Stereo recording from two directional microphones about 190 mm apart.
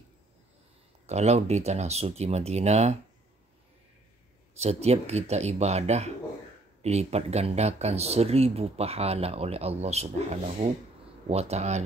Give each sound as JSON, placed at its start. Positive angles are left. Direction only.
{"t": 1.0, "sound": "speech", "side_deg": -35}
{"t": 4.6, "sound": "speech", "side_deg": -35}